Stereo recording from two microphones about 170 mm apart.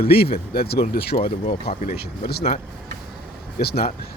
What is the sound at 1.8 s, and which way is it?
Speech, 60° left (ahead or behind).